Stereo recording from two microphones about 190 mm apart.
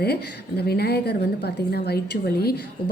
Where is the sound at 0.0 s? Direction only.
55° left (ahead or behind).